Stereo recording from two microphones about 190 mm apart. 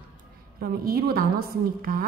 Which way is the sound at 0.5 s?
50° right (ahead or behind).